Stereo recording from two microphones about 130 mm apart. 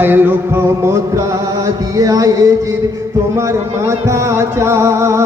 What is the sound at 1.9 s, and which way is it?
Music, 25° right (ahead or behind).